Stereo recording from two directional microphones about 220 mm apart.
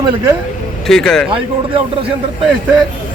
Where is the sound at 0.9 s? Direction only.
5° left (ahead or behind).